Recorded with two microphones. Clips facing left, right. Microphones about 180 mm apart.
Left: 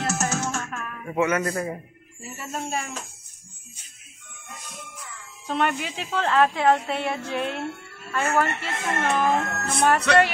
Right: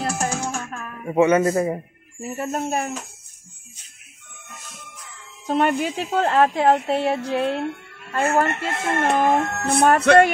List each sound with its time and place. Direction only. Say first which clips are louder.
0.0 s music: right 1 dB; 10° right (ahead or behind)
0.7 s music: right 1 dB; 25° right (ahead or behind)
1.1 s speech: right 7 dB; 30° right (ahead or behind)
2.1 s speech: right 7 dB; 50° right (ahead or behind)
5.5 s speech: right 5 dB; 45° right (ahead or behind)